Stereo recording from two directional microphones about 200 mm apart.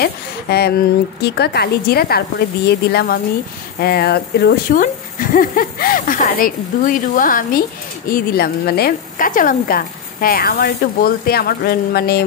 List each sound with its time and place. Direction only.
0.0 s a woman's voice: 55° left (ahead or behind)